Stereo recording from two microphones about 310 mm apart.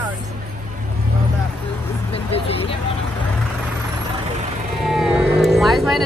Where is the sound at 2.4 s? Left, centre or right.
Centre.